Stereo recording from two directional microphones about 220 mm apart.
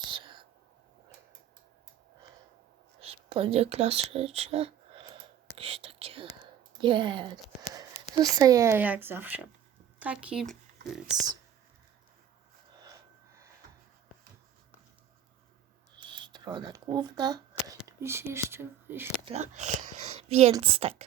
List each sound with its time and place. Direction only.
0.0 s whispering: 20° right (ahead or behind)
3.2 s a sound: 25° right (ahead or behind)
6.7 s speech: 20° right (ahead or behind); by 11.3 s centre (ahead or behind)
16.0 s a sound: 20° right (ahead or behind)
17.8 s speech: 10° right (ahead or behind)
19.2 s speech: 30° right (ahead or behind)